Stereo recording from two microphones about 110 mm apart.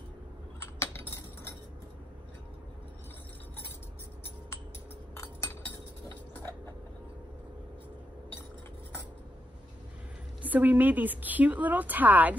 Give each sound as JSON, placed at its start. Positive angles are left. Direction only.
{"t": 0.7, "sound": "keys jangling", "side_deg": 25}
{"t": 5.2, "sound": "chink", "side_deg": 25}
{"t": 10.4, "sound": "a woman's voice", "side_deg": -15}